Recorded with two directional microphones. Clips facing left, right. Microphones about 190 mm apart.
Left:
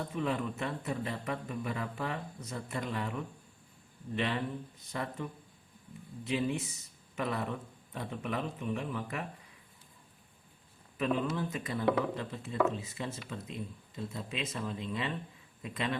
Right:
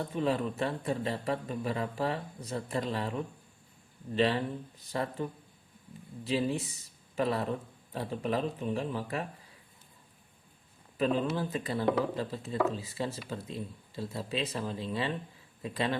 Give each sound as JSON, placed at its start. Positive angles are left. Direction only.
{"t": 0.1, "sound": "a man's voice", "side_deg": -30}
{"t": 10.9, "sound": "a man's voice", "side_deg": -30}